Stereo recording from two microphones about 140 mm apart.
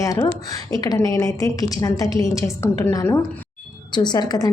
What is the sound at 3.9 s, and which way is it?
Speech, 30° left (ahead or behind).